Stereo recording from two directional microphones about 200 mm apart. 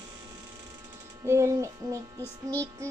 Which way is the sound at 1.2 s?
15° right (ahead or behind).